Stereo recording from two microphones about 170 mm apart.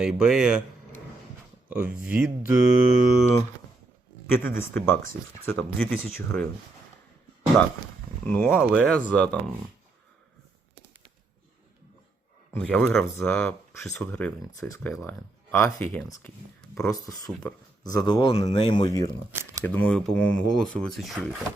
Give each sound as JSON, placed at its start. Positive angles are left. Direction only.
{"t": 0.0, "sound": "speech", "side_deg": -5}
{"t": 1.7, "sound": "speech", "side_deg": -5}
{"t": 4.3, "sound": "speech", "side_deg": 15}
{"t": 8.3, "sound": "speech", "side_deg": 10}
{"t": 12.5, "sound": "speech", "side_deg": 5}
{"t": 16.8, "sound": "speech", "side_deg": 20}
{"t": 19.6, "sound": "speech", "side_deg": 10}